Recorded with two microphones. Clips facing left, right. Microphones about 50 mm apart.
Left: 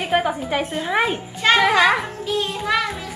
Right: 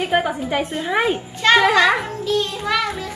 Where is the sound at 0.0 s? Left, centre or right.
Centre.